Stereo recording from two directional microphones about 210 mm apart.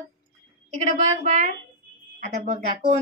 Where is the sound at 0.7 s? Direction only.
35° right (ahead or behind).